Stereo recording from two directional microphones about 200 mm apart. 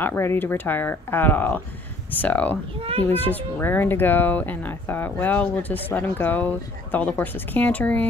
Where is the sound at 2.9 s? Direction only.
30° right (ahead or behind).